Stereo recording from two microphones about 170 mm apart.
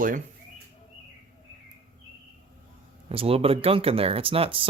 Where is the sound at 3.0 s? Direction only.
35° right (ahead or behind).